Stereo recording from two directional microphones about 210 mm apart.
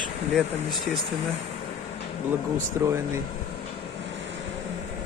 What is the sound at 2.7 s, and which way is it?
Speech, 10° right (ahead or behind).